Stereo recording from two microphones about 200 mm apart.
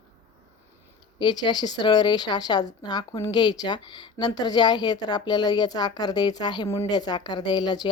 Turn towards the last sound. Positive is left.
turn(degrees=20)  # may be behind; listen again after turning